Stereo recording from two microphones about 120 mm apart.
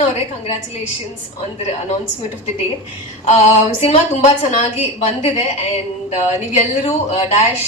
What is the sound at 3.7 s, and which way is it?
A woman's voice, 60° left (ahead or behind).